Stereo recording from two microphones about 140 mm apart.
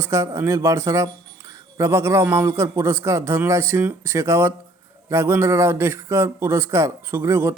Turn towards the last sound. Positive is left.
turn(degrees=-20)  # may be behind; listen again after turning